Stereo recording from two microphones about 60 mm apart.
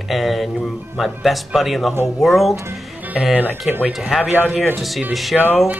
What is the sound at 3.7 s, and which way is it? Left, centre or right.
Speech, centre.